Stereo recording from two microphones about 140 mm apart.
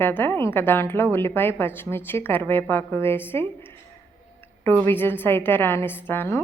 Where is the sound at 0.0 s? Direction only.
15° left (ahead or behind).